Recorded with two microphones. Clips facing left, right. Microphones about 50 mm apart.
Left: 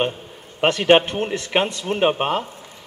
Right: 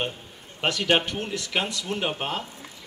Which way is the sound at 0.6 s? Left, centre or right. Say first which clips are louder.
Left 8 dB; left.